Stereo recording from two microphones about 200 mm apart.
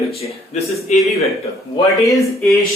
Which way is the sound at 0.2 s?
30° left (ahead or behind).